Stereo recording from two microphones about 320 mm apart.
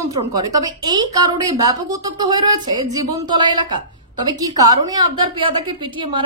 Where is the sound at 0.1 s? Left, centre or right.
Centre.